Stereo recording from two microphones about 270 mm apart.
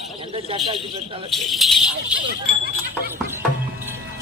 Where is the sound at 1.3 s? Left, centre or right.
Centre.